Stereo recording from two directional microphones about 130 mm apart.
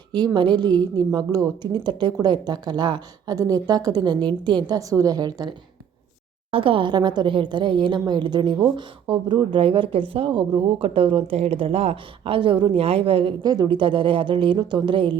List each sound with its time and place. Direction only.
0.3 s a woman's voice: 35° right (ahead or behind)
6.5 s a woman's voice: 45° right (ahead or behind)
13.4 s a woman's voice: 30° right (ahead or behind)